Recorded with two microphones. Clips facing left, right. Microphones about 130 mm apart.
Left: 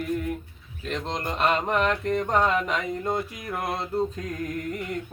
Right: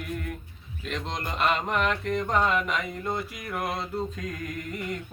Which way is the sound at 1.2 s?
40° left (ahead or behind).